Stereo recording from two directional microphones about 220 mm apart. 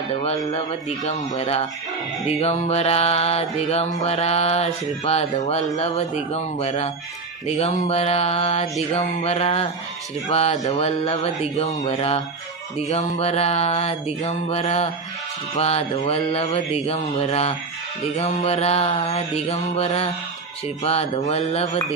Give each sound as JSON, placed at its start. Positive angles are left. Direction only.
{"t": 0.1, "sound": "music", "side_deg": 25}